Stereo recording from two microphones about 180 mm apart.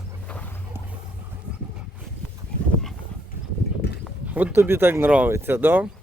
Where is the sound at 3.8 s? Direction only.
65° left (ahead or behind).